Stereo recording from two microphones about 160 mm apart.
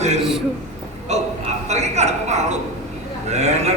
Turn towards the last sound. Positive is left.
turn(degrees=-45)  # may be behind; listen again after turning